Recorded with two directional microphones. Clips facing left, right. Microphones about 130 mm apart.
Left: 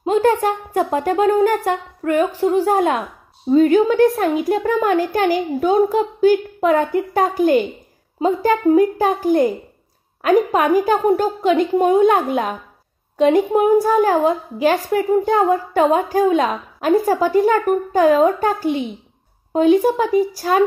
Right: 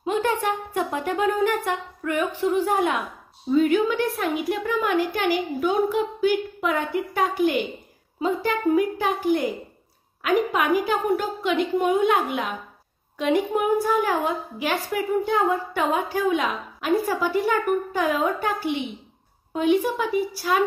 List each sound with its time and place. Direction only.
0.0 s a woman's voice: 40° left (ahead or behind)